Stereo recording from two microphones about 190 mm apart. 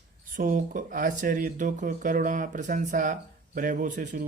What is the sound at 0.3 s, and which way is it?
Speech, 45° right (ahead or behind).